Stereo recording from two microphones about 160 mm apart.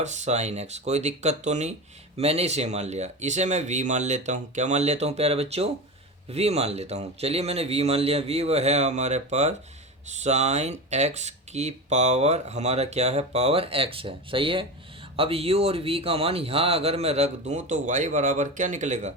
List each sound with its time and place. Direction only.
0.0 s speech: 45° right (ahead or behind)